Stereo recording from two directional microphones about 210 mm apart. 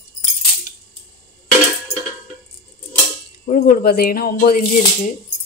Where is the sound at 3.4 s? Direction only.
40° left (ahead or behind).